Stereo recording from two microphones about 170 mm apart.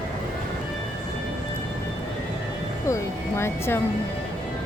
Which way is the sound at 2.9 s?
15° left (ahead or behind).